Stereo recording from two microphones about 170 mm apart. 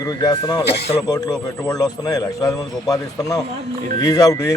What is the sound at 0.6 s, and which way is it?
Speech, 80° left.